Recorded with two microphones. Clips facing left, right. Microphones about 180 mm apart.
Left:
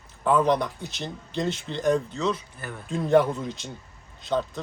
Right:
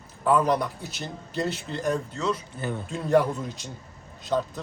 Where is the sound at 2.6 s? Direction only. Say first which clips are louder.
Right 7 dB; 25° right (ahead or behind).